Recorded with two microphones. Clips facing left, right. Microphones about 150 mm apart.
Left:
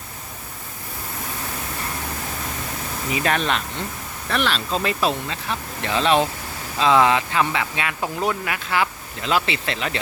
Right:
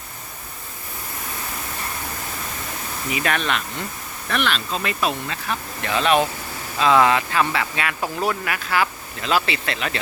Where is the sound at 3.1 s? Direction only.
35° left (ahead or behind).